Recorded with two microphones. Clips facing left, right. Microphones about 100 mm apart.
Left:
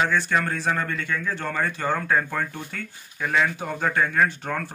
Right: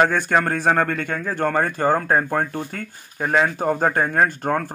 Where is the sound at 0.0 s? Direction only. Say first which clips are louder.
Right 5 dB; 50° right (ahead or behind).